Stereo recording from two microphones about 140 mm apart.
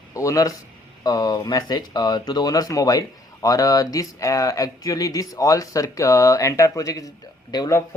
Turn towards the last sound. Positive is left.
turn(degrees=30)  # may be behind; listen again after turning